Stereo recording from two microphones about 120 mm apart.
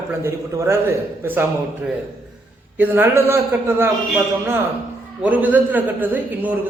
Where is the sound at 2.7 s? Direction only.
15° right (ahead or behind).